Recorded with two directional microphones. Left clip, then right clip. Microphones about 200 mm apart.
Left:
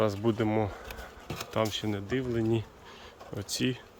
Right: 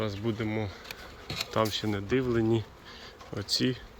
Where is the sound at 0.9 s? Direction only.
45° left (ahead or behind).